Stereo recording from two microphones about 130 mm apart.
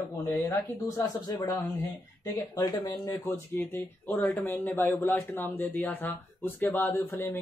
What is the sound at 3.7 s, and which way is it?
Speech, 15° left (ahead or behind).